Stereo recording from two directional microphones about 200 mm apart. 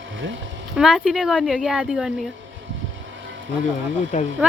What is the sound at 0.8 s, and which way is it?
Speech, centre (ahead or behind).